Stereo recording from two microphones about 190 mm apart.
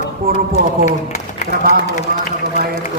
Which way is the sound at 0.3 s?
50° right (ahead or behind).